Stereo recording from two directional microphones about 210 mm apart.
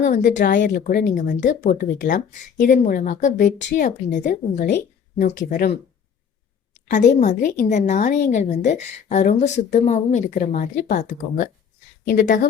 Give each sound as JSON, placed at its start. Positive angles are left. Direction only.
{"t": 0.0, "sound": "a woman's voice", "side_deg": 35}
{"t": 6.9, "sound": "a woman's voice", "side_deg": 35}